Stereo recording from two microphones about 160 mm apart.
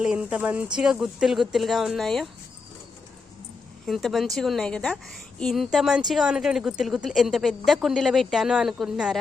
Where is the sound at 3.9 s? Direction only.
Centre (ahead or behind).